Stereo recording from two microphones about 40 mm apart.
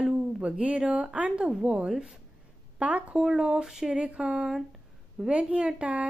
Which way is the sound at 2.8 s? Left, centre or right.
Right.